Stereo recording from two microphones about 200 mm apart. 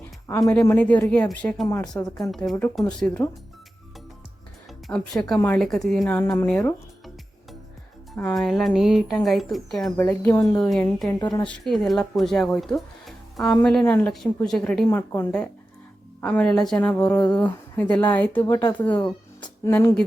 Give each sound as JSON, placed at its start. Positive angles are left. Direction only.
{"t": 0.3, "sound": "speech", "side_deg": 20}
{"t": 4.9, "sound": "speech", "side_deg": 5}
{"t": 8.1, "sound": "speech", "side_deg": 5}
{"t": 10.6, "sound": "speech", "side_deg": 0}
{"t": 11.1, "sound": "speech", "side_deg": 20}
{"t": 11.4, "sound": "speech", "side_deg": 0}
{"t": 19.0, "sound": "music", "side_deg": 20}